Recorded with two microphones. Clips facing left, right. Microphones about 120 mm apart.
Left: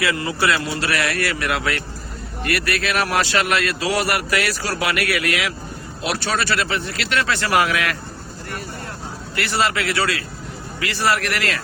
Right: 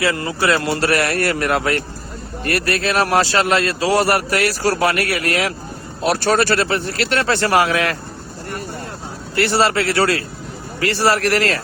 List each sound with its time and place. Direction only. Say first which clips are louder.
0.0 s a man's voice: right 2 dB; 35° right (ahead or behind)
0.6 s a man's voice: right 5 dB; 60° right (ahead or behind); by 7.9 s 30° right (ahead or behind)
9.3 s a man's voice: right 5 dB; 30° right (ahead or behind)